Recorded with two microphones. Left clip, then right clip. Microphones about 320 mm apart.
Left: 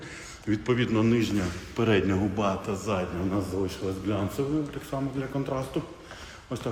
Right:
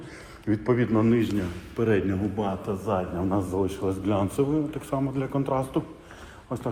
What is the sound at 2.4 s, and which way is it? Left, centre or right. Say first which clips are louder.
Speech: left 1 dB; centre.